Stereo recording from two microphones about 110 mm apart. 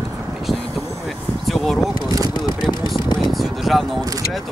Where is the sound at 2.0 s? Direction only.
35° right (ahead or behind).